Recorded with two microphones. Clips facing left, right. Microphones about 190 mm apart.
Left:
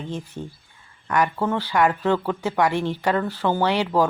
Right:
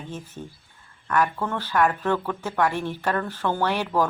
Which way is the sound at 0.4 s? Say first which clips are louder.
Left 4 dB; 20° left (ahead or behind).